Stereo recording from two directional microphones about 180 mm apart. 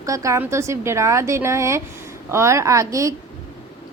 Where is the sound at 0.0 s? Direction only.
15° right (ahead or behind).